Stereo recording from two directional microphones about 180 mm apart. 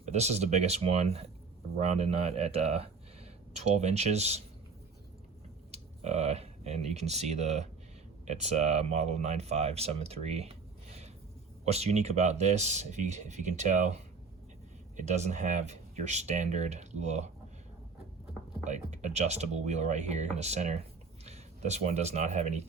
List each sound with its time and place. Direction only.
0.1 s speech: 40° right (ahead or behind)
5.7 s speech: 35° right (ahead or behind)
18.6 s speech: 40° right (ahead or behind)